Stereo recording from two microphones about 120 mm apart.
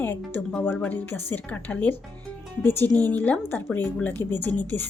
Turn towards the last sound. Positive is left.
turn(degrees=15)  # may be behind; listen again after turning